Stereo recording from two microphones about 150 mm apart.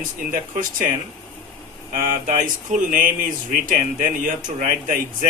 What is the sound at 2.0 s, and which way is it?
Speech, 65° right (ahead or behind).